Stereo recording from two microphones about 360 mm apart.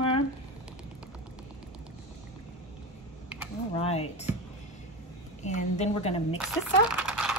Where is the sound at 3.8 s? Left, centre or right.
Centre.